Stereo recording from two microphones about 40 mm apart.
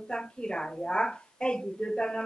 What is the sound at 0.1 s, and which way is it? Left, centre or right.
Speech, left.